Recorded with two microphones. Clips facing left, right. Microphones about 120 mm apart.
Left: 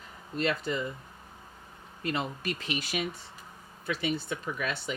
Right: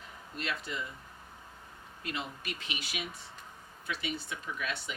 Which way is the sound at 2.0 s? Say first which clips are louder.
Left 7 dB; 40° left (ahead or behind).